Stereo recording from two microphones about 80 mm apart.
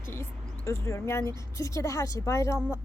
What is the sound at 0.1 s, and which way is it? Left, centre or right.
A woman's voice, left.